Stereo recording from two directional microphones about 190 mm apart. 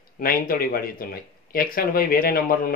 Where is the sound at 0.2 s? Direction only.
50° left (ahead or behind).